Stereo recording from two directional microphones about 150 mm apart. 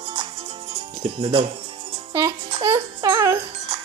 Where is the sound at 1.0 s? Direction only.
35° right (ahead or behind).